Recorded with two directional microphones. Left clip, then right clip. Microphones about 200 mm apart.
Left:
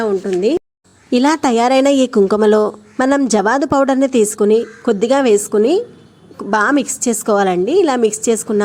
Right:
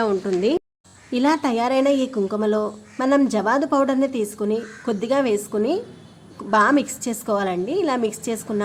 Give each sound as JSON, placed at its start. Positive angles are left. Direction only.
{"t": 0.0, "sound": "speech", "side_deg": 15}
{"t": 1.1, "sound": "speech", "side_deg": 40}